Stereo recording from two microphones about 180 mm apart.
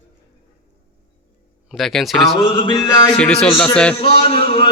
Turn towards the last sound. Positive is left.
turn(degrees=30)  # may be behind; listen again after turning